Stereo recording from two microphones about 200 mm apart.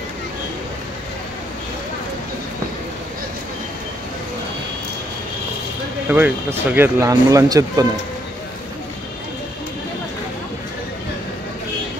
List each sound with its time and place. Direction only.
6.0 s speech: 10° right (ahead or behind)